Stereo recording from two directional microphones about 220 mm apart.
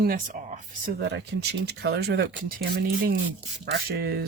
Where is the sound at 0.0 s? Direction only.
40° right (ahead or behind).